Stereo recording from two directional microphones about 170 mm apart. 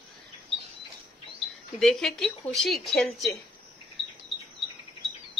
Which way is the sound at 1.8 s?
Centre (ahead or behind).